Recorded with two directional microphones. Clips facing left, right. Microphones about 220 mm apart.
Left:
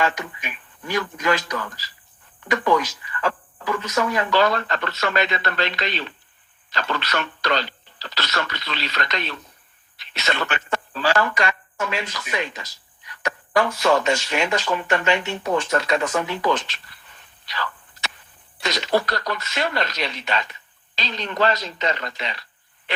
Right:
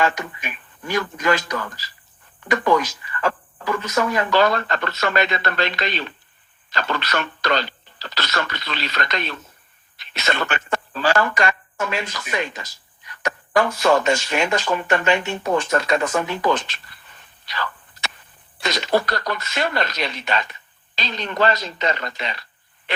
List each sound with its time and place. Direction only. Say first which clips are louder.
0.0 s speech: right 2 dB; 50° right (ahead or behind)
17.4 s a sound: right 1 dB; 50° right (ahead or behind)
18.6 s speech: right 1 dB; 50° right (ahead or behind)